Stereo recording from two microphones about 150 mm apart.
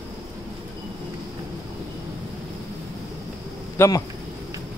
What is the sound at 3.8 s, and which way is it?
Speech, 15° left (ahead or behind).